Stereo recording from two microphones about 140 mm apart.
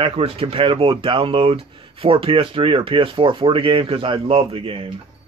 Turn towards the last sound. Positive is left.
turn(degrees=-40)  # may be behind; listen again after turning